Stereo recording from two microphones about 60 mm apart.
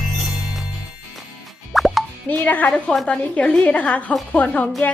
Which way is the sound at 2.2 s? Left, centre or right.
Left.